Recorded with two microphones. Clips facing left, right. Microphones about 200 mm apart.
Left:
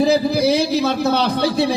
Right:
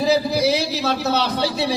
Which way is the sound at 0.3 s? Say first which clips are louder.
Left 3 dB; 50° left (ahead or behind).